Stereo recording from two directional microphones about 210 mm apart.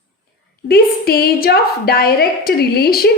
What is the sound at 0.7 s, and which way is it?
A woman's voice, 45° left (ahead or behind).